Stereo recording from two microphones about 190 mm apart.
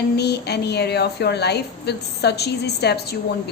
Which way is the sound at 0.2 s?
60° left (ahead or behind).